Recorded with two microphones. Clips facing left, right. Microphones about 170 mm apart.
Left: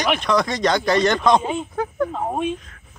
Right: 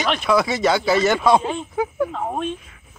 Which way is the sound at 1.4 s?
5° left (ahead or behind).